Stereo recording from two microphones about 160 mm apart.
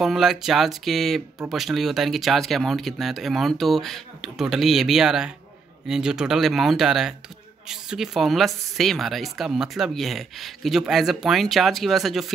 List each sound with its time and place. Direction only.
0.0 s speech: centre (ahead or behind)